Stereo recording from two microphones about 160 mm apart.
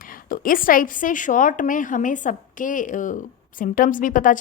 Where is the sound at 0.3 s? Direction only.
60° left (ahead or behind).